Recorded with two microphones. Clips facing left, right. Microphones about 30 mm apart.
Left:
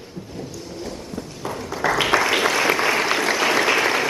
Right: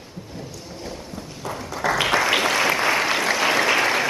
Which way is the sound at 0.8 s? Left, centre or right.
Centre.